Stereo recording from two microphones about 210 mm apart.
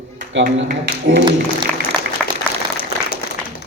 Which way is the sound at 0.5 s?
60° right (ahead or behind).